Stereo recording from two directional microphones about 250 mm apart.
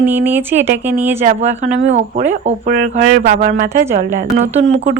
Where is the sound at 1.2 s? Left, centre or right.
Right.